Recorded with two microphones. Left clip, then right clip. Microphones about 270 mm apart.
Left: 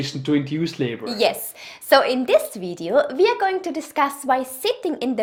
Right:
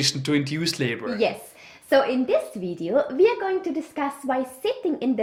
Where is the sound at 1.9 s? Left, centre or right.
Left.